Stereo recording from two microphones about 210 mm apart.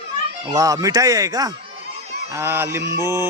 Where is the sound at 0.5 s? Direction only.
15° right (ahead or behind).